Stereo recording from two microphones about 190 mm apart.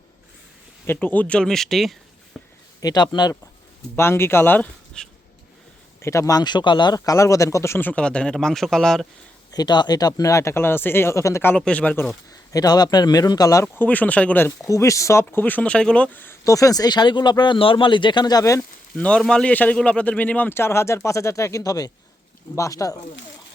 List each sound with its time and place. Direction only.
0.9 s speech: 10° left (ahead or behind)
2.3 s a sound: centre (ahead or behind)
2.8 s speech: 20° left (ahead or behind); by 9.0 s 5° left (ahead or behind)
9.5 s speech: 20° left (ahead or behind)
12.3 s speech: 20° left (ahead or behind)
19.0 s speech: 5° left (ahead or behind)